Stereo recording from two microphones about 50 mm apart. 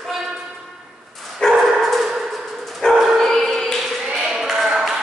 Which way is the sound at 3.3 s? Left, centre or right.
Centre.